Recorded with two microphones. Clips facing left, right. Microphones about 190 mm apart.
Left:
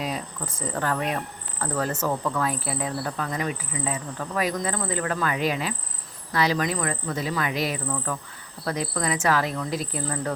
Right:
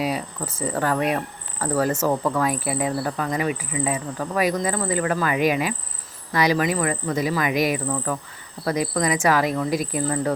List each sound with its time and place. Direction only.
0.0 s speech: 10° right (ahead or behind)